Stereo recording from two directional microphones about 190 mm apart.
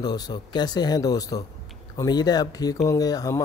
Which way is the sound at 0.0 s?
20° left (ahead or behind).